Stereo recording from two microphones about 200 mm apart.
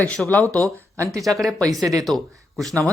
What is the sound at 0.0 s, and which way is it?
Speech, 5° left (ahead or behind).